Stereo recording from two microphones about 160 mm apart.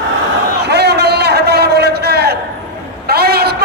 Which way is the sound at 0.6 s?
90° right.